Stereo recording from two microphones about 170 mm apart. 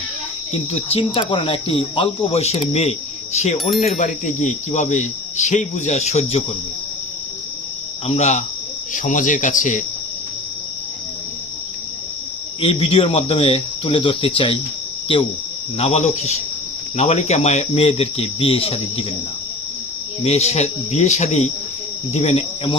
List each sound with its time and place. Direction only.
0.5 s speech: 35° left (ahead or behind)
8.0 s speech: 40° left (ahead or behind)
12.5 s speech: 35° left (ahead or behind)
20.2 s speech: 40° left (ahead or behind)